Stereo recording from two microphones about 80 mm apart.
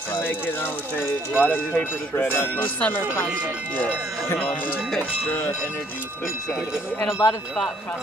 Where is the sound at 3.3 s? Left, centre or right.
Centre.